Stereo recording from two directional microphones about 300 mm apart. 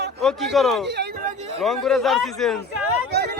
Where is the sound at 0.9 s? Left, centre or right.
Right.